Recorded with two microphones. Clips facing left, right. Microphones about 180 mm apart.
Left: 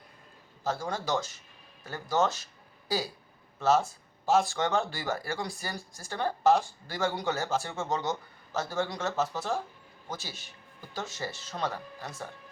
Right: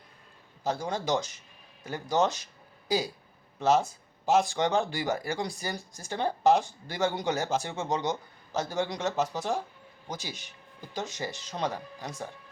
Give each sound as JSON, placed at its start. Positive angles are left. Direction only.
{"t": 0.6, "sound": "speech", "side_deg": -20}
{"t": 3.6, "sound": "speech", "side_deg": -15}